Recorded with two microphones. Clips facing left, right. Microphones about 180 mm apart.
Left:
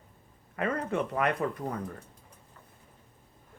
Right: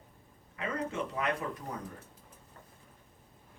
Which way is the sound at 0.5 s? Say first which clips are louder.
Left 5 dB; 55° left (ahead or behind).